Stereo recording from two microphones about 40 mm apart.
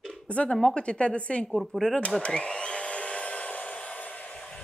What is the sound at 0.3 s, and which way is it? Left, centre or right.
Speech, left.